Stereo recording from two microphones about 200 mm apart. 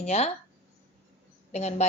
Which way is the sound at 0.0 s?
30° left (ahead or behind).